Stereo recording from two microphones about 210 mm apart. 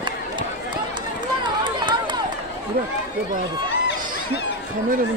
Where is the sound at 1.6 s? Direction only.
20° right (ahead or behind).